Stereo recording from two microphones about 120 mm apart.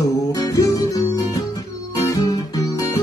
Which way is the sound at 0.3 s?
30° left (ahead or behind).